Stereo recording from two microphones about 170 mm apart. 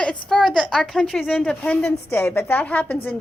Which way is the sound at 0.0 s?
5° left (ahead or behind).